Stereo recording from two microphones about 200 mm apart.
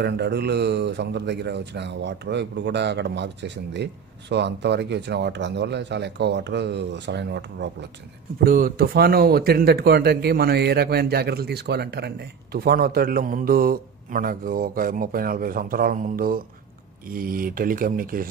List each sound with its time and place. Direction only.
0.0 s speech: 55° right (ahead or behind)
8.5 s a man's voice: 45° right (ahead or behind)